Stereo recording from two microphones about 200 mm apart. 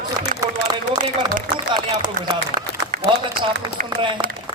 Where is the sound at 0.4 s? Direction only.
15° right (ahead or behind).